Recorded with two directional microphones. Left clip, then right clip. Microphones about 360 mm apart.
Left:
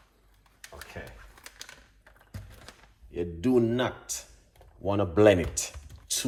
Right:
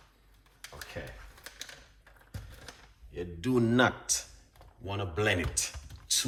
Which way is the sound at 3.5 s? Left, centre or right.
Centre.